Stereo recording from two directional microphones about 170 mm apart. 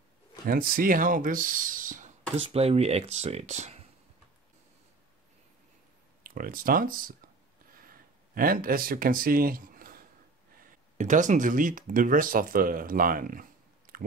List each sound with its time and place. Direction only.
0.5 s speech: 60° right (ahead or behind)
2.4 s speech: 35° right (ahead or behind)
6.2 s speech: 55° right (ahead or behind)
7.7 s a sound: 55° right (ahead or behind)
10.5 s speech: 55° right (ahead or behind)
13.9 s chewing: 55° right (ahead or behind)